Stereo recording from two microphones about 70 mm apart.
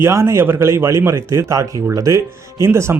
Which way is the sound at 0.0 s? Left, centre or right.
Right.